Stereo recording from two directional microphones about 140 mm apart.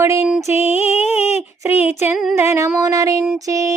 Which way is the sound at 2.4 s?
20° right (ahead or behind).